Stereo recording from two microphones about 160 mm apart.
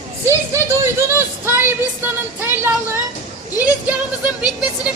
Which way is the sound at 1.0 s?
15° right (ahead or behind).